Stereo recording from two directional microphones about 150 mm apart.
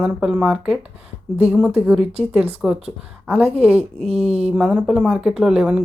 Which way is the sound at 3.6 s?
40° right (ahead or behind).